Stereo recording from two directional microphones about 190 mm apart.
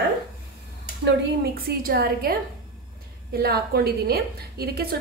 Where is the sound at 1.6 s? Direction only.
50° right (ahead or behind).